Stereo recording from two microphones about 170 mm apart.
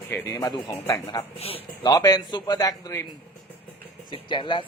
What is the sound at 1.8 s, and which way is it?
Speech, 20° left (ahead or behind).